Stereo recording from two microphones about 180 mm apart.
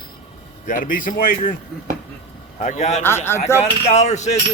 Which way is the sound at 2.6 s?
40° left (ahead or behind).